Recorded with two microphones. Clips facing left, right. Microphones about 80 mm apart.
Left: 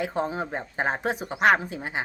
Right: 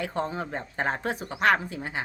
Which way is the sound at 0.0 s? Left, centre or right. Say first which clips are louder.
Left 2 dB; centre.